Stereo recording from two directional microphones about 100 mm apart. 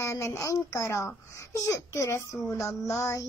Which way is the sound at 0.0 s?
30° left (ahead or behind).